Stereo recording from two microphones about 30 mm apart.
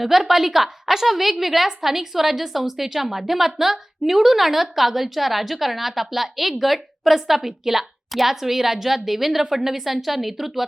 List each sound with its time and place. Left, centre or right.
0.0 s a woman's voice: centre